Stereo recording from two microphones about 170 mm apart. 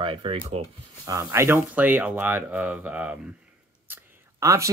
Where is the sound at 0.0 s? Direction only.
30° right (ahead or behind).